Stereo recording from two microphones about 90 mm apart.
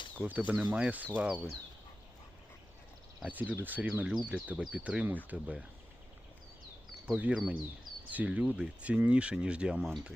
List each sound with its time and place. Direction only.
0.2 s speech: 15° right (ahead or behind)
3.2 s speech: 20° right (ahead or behind)
7.0 s speech: 15° right (ahead or behind)